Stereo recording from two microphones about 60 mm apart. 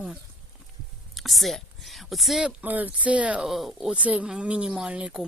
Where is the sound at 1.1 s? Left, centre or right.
Centre.